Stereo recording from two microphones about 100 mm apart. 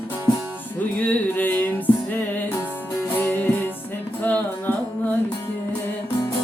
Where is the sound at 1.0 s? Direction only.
15° left (ahead or behind).